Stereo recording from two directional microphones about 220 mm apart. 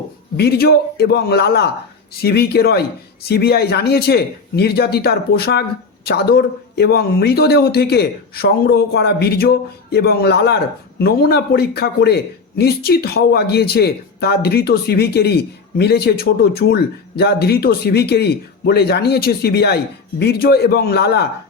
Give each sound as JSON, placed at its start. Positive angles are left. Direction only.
{"t": 0.3, "sound": "a man's voice", "side_deg": 45}